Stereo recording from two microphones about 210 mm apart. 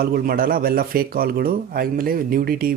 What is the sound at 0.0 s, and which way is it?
Speech, 45° right (ahead or behind).